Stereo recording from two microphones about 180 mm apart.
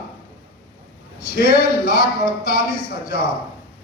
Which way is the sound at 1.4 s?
55° left (ahead or behind).